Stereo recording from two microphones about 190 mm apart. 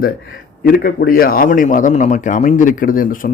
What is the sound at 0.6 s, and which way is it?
A man's voice, 50° left (ahead or behind).